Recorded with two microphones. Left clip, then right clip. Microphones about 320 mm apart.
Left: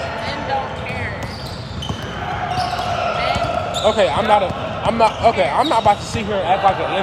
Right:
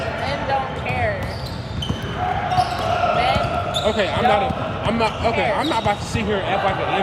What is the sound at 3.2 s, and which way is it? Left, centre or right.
Basketball bounce, centre.